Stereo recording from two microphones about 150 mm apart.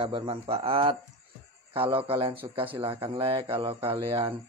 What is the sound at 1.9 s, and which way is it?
Speech, 35° right (ahead or behind).